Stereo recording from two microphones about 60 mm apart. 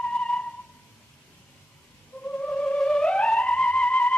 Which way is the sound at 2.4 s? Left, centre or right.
Centre.